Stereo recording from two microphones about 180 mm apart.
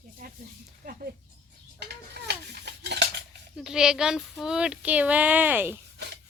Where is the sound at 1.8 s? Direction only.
65° right (ahead or behind).